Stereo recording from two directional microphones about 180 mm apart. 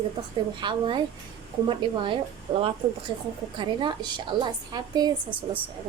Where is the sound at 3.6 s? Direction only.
25° right (ahead or behind).